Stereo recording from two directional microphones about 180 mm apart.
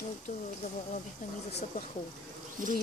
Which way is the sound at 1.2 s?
45° left (ahead or behind).